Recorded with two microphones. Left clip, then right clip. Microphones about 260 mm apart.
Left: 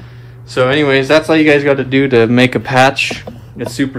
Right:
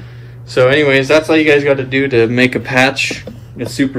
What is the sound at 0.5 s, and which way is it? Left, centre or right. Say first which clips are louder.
A man's voice: right 2 dB; centre.